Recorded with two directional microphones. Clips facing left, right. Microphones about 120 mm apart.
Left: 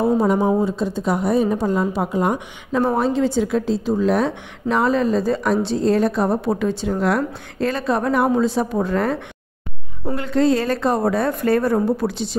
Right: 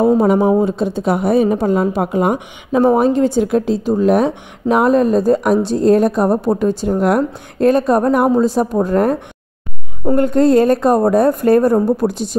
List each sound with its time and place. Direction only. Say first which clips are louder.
0.0 s a woman's voice: right 5 dB; 60° right (ahead or behind)